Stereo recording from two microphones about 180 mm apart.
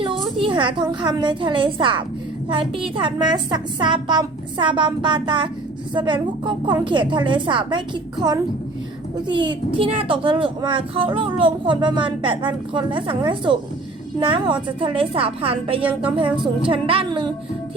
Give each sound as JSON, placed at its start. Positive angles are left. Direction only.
{"t": 0.0, "sound": "a woman's voice", "side_deg": -30}